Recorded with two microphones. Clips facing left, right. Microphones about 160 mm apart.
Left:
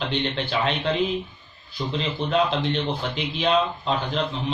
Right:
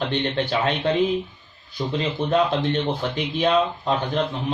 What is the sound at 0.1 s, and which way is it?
Speech, 50° right (ahead or behind).